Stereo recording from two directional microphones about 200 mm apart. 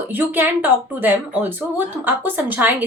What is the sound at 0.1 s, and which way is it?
Speech, 10° right (ahead or behind).